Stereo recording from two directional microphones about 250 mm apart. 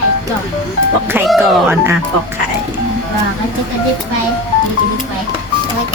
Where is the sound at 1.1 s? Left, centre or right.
Centre.